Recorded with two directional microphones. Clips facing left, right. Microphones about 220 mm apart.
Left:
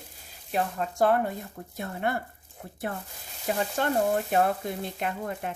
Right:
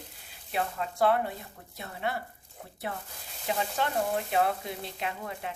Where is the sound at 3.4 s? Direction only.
50° left (ahead or behind).